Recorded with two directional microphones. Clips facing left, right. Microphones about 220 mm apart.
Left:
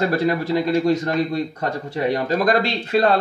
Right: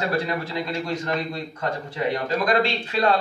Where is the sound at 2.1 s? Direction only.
40° left (ahead or behind).